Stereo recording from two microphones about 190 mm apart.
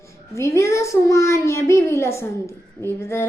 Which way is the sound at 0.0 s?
15° left (ahead or behind).